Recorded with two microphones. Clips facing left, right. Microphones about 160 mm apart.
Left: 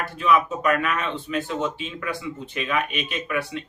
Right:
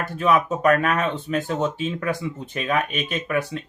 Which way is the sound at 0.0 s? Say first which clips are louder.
Right 1 dB; 45° right (ahead or behind).